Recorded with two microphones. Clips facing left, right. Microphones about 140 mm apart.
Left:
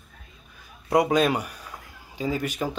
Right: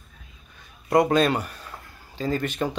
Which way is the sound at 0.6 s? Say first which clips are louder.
Right 2 dB; 10° left (ahead or behind).